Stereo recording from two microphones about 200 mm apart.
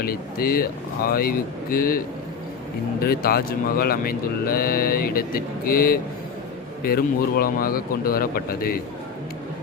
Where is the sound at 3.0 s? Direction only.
50° left (ahead or behind).